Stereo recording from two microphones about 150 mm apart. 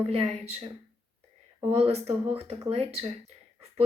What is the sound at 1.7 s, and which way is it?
Speech, 45° right (ahead or behind).